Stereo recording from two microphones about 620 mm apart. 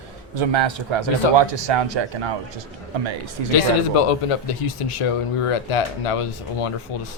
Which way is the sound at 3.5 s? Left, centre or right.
Left.